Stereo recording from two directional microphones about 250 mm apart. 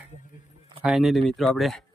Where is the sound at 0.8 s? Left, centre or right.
Centre.